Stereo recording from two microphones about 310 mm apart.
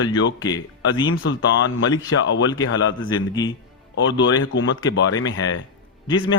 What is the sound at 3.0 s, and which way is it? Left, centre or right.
Speech, centre.